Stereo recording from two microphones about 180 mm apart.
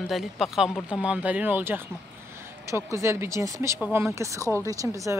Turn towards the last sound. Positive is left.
turn(degrees=-15)  # may be behind; listen again after turning